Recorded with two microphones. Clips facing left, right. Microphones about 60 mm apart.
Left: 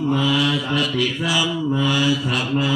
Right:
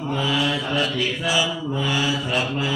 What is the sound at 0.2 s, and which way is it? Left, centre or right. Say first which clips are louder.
Mantra: left 3 dB; right.